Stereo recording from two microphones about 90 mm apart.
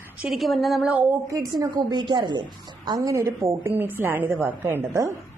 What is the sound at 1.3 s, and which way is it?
A woman's voice, 40° right (ahead or behind).